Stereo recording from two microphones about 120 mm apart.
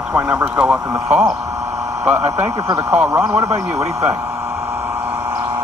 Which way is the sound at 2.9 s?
15° right (ahead or behind).